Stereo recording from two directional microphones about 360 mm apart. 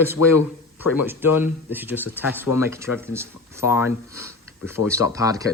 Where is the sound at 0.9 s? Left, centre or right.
Centre.